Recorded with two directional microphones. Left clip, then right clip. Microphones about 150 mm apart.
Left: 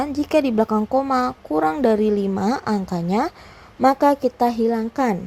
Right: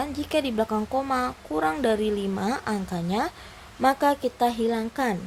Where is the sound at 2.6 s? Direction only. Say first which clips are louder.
Left 5 dB; 45° left (ahead or behind).